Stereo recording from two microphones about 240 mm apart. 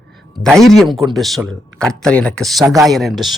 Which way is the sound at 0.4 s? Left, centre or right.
Centre.